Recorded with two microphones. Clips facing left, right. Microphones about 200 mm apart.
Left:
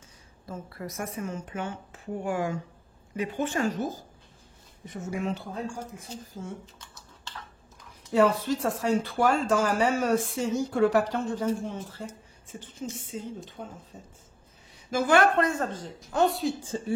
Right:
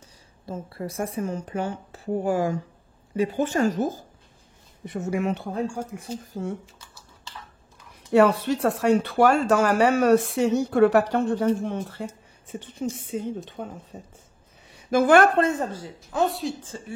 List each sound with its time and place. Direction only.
0.5 s a woman's voice: 30° right (ahead or behind); by 3.9 s 45° right (ahead or behind)
4.8 s speech: 70° right (ahead or behind)
8.1 s a woman's voice: 70° right (ahead or behind); by 15.3 s 50° right (ahead or behind)
15.3 s a woman's voice: 20° right (ahead or behind)
15.7 s a woman's voice: 5° right (ahead or behind)
16.7 s speech: 25° left (ahead or behind)